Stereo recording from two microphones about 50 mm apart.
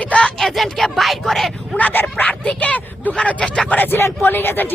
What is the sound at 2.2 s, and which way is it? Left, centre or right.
Speech, left.